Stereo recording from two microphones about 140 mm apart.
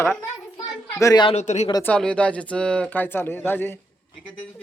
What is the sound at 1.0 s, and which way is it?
Speech, 30° left (ahead or behind).